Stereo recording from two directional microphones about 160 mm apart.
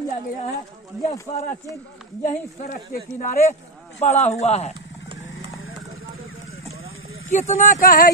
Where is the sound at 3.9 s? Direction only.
45° left (ahead or behind).